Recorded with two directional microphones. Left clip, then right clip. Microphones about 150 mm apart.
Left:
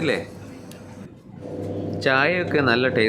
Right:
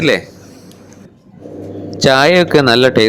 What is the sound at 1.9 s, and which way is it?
Speech, 50° right (ahead or behind).